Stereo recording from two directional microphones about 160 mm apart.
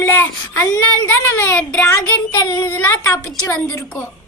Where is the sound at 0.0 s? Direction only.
15° left (ahead or behind).